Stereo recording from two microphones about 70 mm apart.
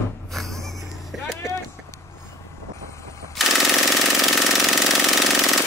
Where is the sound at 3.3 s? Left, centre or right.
Centre.